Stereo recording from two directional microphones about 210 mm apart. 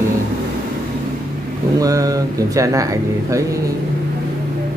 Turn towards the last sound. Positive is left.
turn(degrees=-15)  # may be behind; listen again after turning